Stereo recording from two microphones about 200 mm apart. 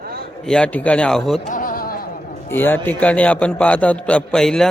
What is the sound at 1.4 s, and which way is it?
Music, 40° left (ahead or behind).